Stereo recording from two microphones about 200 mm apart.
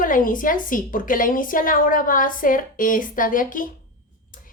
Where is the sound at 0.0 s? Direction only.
45° left (ahead or behind).